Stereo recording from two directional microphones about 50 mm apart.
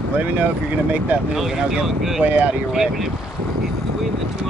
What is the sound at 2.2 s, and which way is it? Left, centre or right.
Speech, right.